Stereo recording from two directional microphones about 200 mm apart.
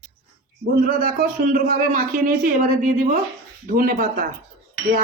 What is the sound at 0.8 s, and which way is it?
Speech, 45° right (ahead or behind).